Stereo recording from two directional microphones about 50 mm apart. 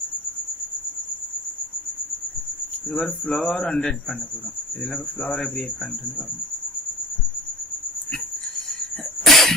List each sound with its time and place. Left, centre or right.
2.9 s speech: centre
5.4 s speech: centre
9.2 s cough: centre